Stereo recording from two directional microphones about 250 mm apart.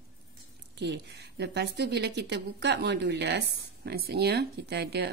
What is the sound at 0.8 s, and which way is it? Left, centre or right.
A woman's voice, right.